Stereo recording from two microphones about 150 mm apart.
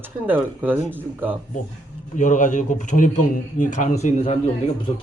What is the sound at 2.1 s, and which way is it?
Speech, 55° left (ahead or behind).